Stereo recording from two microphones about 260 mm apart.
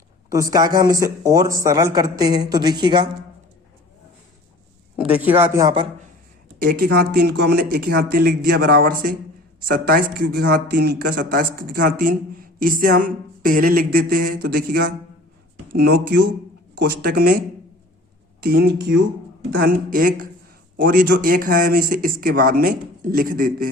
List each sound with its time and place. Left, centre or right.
0.3 s a woman's voice: centre
4.9 s a woman's voice: centre
6.8 s speech: right
18.5 s speech: right